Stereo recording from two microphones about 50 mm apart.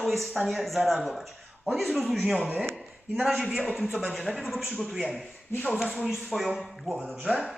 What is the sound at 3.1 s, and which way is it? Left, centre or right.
Speech, right.